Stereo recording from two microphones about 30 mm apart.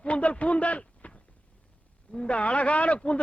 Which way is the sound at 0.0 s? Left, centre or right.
Left.